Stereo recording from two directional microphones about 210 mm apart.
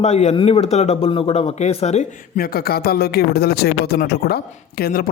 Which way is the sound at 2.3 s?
45° left (ahead or behind).